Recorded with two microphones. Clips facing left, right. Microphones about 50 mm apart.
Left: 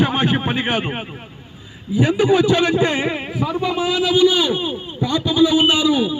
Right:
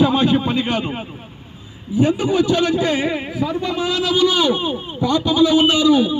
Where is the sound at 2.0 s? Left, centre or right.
Left.